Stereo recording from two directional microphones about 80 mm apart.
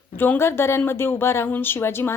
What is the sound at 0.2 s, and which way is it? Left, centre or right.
A woman's voice, left.